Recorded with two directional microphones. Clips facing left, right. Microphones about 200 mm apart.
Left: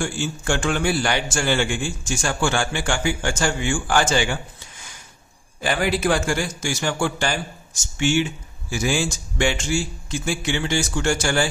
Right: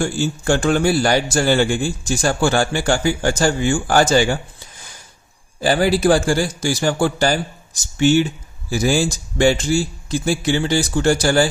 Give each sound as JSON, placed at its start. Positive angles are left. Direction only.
{"t": 0.0, "sound": "a man's voice", "side_deg": -40}